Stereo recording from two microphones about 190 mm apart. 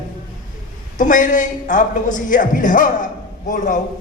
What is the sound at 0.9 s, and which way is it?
A man's voice, 45° left (ahead or behind).